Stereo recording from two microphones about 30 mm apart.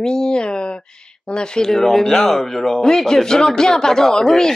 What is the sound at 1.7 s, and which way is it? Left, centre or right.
Speech, centre.